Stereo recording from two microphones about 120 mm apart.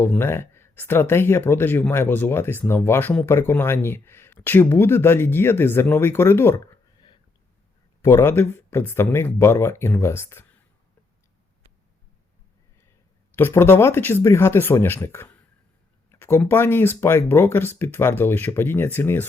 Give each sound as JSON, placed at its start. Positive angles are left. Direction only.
{"t": 0.0, "sound": "speech", "side_deg": 20}
{"t": 8.0, "sound": "speech", "side_deg": 20}
{"t": 13.3, "sound": "speech", "side_deg": 20}